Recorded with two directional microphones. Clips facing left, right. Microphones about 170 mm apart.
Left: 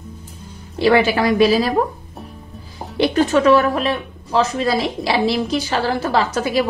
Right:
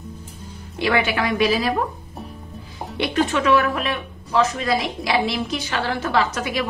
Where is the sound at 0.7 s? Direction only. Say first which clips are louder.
Left 6 dB; 35° left (ahead or behind).